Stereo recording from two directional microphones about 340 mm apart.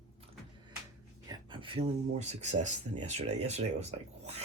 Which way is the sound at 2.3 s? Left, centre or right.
Centre.